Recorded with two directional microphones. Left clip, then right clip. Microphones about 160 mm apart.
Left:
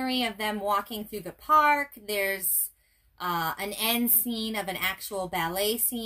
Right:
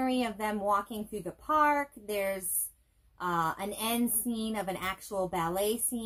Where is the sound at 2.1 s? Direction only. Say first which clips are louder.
Left 4 dB; 40° left (ahead or behind).